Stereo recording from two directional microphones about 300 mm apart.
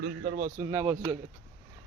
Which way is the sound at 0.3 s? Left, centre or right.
Right.